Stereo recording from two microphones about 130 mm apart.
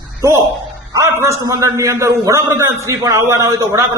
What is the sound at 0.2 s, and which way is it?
A man's voice, 25° right (ahead or behind).